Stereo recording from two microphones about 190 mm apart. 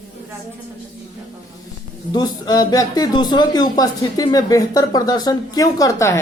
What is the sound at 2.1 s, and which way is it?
Speech, 20° left (ahead or behind).